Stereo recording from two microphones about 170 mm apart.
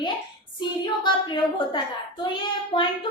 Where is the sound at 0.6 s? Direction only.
25° left (ahead or behind).